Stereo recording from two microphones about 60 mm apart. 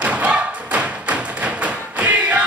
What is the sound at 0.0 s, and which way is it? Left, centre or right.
Thump, right.